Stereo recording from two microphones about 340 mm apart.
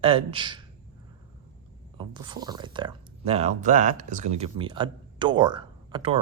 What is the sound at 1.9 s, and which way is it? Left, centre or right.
Speech, centre.